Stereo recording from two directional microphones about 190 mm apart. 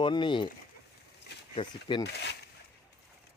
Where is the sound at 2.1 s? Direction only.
65° left (ahead or behind).